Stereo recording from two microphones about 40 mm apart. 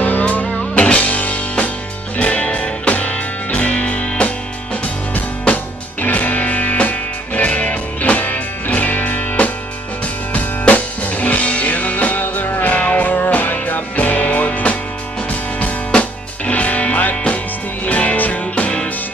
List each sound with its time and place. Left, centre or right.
0.2 s music: left
5.5 s music: left
8.2 s music: left
10.7 s music: left
17.1 s music: left
17.8 s music: left